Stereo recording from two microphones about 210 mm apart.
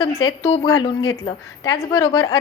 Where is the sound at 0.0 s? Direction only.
20° left (ahead or behind).